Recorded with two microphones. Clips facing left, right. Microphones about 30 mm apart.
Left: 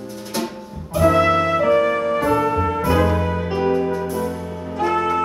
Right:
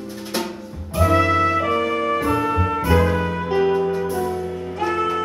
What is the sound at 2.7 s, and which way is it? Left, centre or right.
Music, centre.